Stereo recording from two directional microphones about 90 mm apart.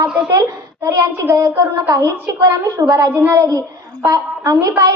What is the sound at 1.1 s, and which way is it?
A woman's voice, 30° right (ahead or behind).